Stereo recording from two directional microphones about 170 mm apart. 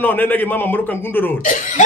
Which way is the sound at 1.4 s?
50° left (ahead or behind).